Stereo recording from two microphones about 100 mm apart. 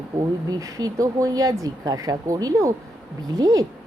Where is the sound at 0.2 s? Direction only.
35° right (ahead or behind).